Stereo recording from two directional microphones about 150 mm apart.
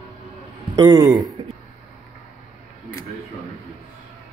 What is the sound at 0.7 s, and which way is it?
Snicker, 25° right (ahead or behind).